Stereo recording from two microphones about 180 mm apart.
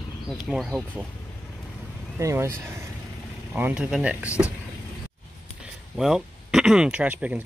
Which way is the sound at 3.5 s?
10° right (ahead or behind).